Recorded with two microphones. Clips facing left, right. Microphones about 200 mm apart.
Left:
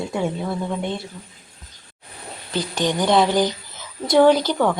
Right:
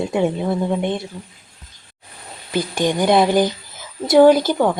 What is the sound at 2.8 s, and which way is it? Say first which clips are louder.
Speech: right 2 dB; 10° right (ahead or behind).